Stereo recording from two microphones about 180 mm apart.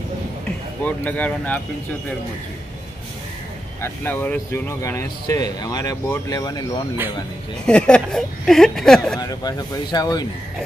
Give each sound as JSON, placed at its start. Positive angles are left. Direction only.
{"t": 0.8, "sound": "speech", "side_deg": 10}
{"t": 3.8, "sound": "speech", "side_deg": 10}
{"t": 7.6, "sound": "speech", "side_deg": 5}
{"t": 9.2, "sound": "speech", "side_deg": 20}